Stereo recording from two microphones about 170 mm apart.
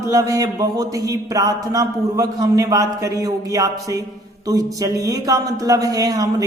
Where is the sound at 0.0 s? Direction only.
20° right (ahead or behind).